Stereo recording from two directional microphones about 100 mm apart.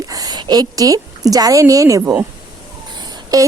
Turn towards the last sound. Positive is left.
turn(degrees=-35)  # may be behind; listen again after turning